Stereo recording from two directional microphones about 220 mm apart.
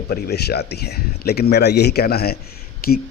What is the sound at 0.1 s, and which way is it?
A man's voice, 45° left (ahead or behind).